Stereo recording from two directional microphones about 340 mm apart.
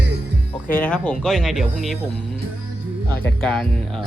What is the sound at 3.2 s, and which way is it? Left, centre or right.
Speech, centre.